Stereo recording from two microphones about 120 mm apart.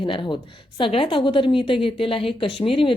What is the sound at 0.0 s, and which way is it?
A woman's voice, 45° left (ahead or behind).